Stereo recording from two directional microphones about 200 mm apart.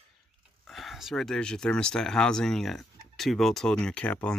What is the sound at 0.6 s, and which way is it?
Speech, centre (ahead or behind).